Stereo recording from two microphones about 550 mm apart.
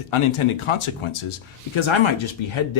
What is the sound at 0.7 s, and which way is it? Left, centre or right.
Speech, left.